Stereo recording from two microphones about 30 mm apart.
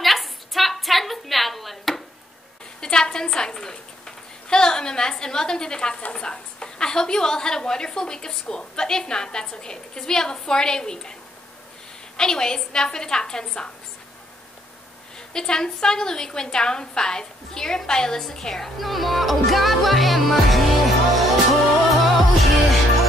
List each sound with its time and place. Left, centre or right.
0.0 s a sound: centre
2.8 s a sound: left
6.1 s a woman's voice: left
12.2 s a woman's voice: left
15.1 s a woman's voice: left
18.8 s music: centre